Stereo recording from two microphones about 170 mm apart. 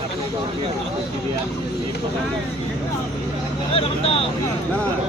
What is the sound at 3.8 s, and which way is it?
Speech, 35° left (ahead or behind).